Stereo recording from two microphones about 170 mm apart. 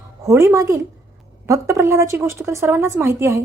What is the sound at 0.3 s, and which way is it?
A woman's voice, 15° right (ahead or behind).